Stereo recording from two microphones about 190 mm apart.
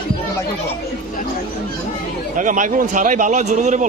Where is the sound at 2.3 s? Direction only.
45° right (ahead or behind).